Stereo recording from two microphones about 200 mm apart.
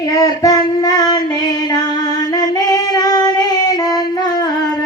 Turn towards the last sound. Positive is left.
turn(degrees=20)  # may be behind; listen again after turning